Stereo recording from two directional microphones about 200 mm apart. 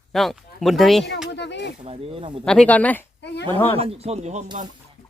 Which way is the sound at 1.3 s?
60° left (ahead or behind).